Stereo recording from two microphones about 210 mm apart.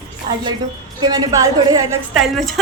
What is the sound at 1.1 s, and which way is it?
Speech, 15° right (ahead or behind).